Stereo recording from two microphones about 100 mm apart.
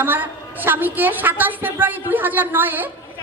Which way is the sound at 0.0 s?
20° right (ahead or behind).